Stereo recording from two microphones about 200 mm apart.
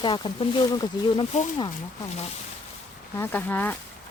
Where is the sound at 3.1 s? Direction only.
10° left (ahead or behind).